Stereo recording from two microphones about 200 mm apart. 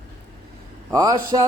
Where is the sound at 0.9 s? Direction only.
20° right (ahead or behind).